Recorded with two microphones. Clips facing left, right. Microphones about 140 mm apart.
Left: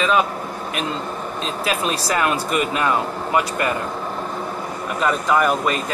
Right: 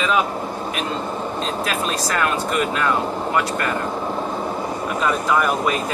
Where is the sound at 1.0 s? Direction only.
20° right (ahead or behind).